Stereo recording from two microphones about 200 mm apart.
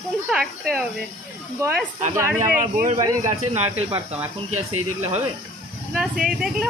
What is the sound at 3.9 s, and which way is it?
Speech, 15° right (ahead or behind).